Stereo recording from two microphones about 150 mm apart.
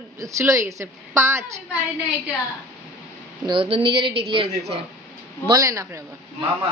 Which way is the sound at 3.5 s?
35° right (ahead or behind).